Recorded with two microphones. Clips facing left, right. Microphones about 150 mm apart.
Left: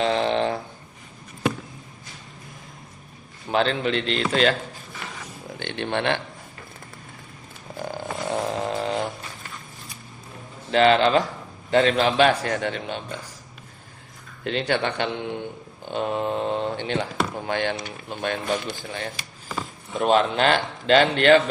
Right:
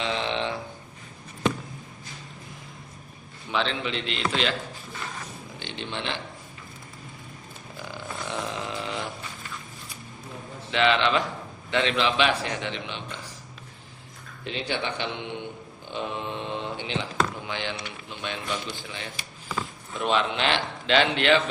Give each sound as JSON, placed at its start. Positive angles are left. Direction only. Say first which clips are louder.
{"t": 0.0, "sound": "a sound", "louder": "left 7 dB", "side_deg": 40}
{"t": 3.5, "sound": "speech", "louder": "left 6 dB", "side_deg": 45}
{"t": 5.5, "sound": "speech", "louder": "left 8 dB", "side_deg": 60}
{"t": 7.8, "sound": "a sound", "louder": "left 7 dB", "side_deg": 45}
{"t": 10.7, "sound": "mantra", "louder": "left 5 dB", "side_deg": 40}
{"t": 11.7, "sound": "speech", "louder": "left 5 dB", "side_deg": 45}
{"t": 14.4, "sound": "speech", "louder": "left 6 dB", "side_deg": 55}
{"t": 16.0, "sound": "mantra", "louder": "left 7 dB", "side_deg": 45}
{"t": 16.8, "sound": "speech", "louder": "left 3 dB", "side_deg": 45}